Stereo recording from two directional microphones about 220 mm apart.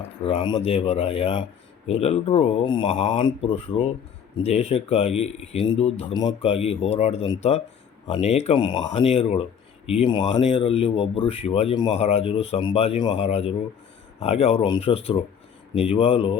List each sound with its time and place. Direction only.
0.2 s speech: 25° left (ahead or behind)